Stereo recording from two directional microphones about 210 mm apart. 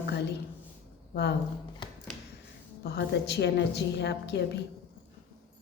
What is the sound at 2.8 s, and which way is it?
A woman's voice, 55° left (ahead or behind).